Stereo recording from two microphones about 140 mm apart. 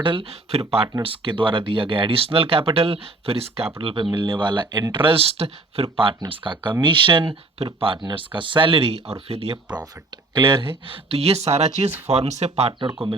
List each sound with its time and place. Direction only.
0.0 s speech: 40° right (ahead or behind)